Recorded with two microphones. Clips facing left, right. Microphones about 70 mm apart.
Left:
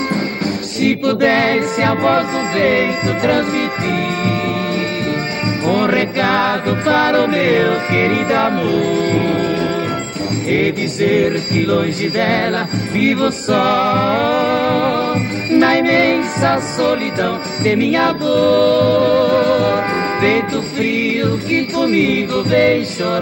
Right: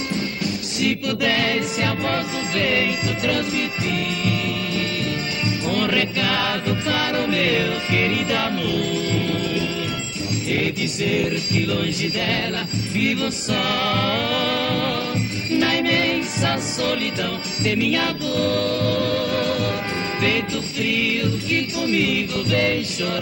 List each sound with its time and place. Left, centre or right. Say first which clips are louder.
0.7 s music: left 8 dB; left